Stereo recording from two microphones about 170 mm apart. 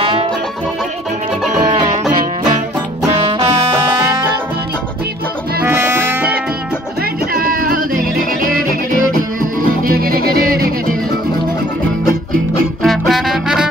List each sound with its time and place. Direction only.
5.6 s music: 15° right (ahead or behind)
7.3 s music: 55° right (ahead or behind)
12.8 s music: centre (ahead or behind)